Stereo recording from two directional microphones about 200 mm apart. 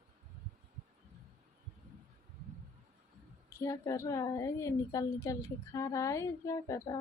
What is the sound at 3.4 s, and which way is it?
A woman's voice, 15° left (ahead or behind).